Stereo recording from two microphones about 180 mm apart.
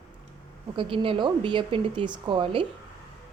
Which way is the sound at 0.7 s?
25° right (ahead or behind).